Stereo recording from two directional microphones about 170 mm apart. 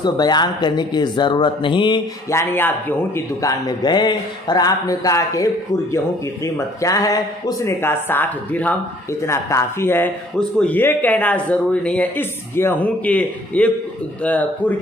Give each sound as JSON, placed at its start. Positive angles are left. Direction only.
{"t": 0.0, "sound": "speech", "side_deg": 25}
{"t": 2.3, "sound": "a man's voice", "side_deg": 10}